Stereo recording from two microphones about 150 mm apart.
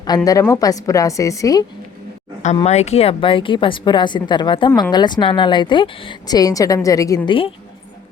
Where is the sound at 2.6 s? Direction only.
45° left (ahead or behind); by 7.2 s 20° left (ahead or behind).